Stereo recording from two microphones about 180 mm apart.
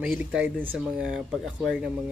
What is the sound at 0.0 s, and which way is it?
Speech, 5° right (ahead or behind).